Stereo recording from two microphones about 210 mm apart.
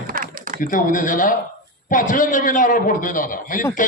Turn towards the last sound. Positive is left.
turn(degrees=40)  # may be behind; listen again after turning